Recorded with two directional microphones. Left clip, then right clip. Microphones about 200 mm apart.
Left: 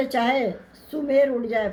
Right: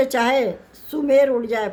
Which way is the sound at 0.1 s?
45° right (ahead or behind).